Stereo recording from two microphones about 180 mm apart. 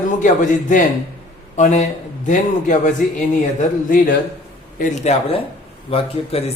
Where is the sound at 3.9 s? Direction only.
50° left (ahead or behind).